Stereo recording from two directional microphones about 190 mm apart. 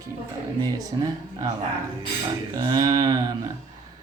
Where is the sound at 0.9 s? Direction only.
25° right (ahead or behind).